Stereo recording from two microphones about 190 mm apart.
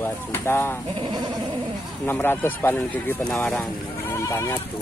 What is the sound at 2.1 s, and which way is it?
Speech, 10° left (ahead or behind).